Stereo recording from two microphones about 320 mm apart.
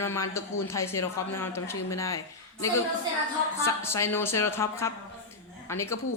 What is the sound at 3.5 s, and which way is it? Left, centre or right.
Speech, centre.